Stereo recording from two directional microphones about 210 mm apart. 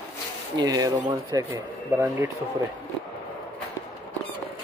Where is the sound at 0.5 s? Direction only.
15° right (ahead or behind).